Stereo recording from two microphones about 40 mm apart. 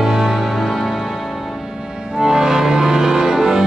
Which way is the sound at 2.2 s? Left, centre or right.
Centre.